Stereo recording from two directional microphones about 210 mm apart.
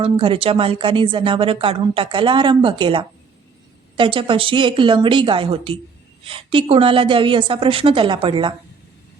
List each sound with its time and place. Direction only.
0.0 s a woman's voice: 25° right (ahead or behind)